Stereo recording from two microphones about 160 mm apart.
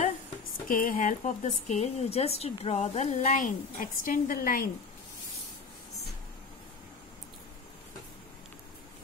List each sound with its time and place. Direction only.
0.7 s speech: 60° left (ahead or behind)